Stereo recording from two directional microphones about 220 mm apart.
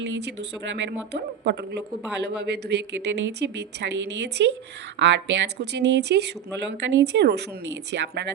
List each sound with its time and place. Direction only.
0.0 s speech: 50° right (ahead or behind)